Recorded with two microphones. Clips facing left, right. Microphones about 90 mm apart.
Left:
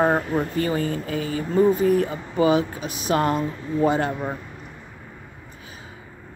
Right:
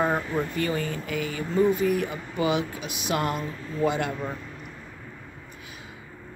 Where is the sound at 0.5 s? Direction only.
35° left (ahead or behind).